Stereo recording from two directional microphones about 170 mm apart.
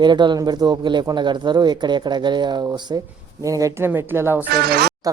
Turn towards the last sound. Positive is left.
turn(degrees=-70)  # may be behind; listen again after turning